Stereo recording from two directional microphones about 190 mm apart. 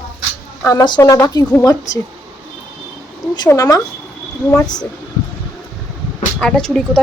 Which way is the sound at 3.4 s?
15° left (ahead or behind).